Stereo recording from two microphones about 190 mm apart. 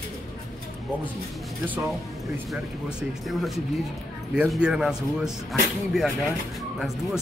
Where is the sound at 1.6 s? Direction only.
10° right (ahead or behind).